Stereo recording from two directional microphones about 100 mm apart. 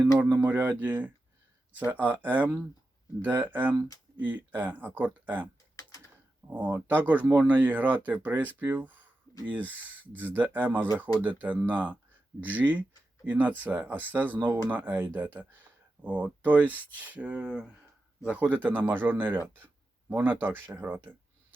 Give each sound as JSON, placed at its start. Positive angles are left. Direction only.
{"t": 0.2, "sound": "speech", "side_deg": -15}
{"t": 6.5, "sound": "speech", "side_deg": -20}